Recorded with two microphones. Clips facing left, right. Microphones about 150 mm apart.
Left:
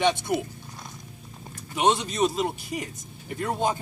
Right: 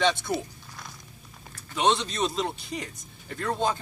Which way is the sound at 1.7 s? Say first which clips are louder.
Left 1 dB; 10° left (ahead or behind).